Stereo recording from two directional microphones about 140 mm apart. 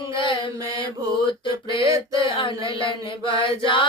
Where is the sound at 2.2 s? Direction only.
35° left (ahead or behind).